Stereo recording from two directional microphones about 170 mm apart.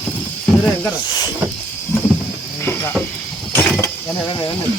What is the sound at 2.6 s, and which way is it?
Cricket, 10° left (ahead or behind).